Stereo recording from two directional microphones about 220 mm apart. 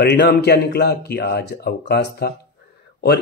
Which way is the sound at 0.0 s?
50° left (ahead or behind).